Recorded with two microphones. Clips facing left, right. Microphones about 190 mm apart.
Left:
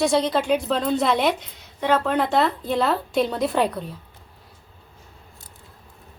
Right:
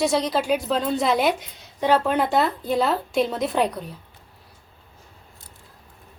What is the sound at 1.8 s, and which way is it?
Speech, 15° right (ahead or behind).